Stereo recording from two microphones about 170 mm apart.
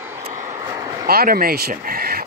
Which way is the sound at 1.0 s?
60° right (ahead or behind).